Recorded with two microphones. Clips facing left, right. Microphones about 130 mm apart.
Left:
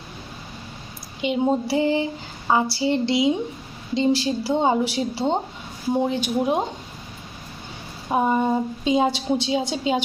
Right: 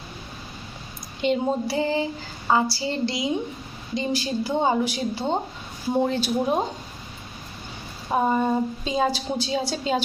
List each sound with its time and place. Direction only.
1.2 s speech: 10° left (ahead or behind)
1.6 s a woman's voice: 20° left (ahead or behind)
6.0 s speech: 15° left (ahead or behind)
8.1 s a woman's voice: 15° left (ahead or behind)